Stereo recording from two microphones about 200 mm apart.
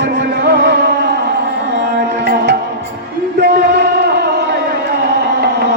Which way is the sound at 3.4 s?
60° right (ahead or behind).